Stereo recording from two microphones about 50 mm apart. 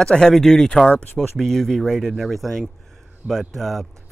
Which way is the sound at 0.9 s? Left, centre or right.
Left.